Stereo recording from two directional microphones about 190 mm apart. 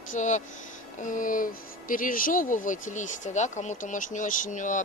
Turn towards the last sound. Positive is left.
turn(degrees=40)  # may be behind; listen again after turning